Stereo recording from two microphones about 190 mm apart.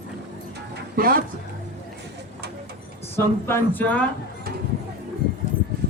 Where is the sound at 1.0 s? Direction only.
50° right (ahead or behind).